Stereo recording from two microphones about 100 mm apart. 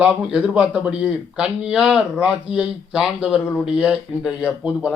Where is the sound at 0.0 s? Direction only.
10° right (ahead or behind).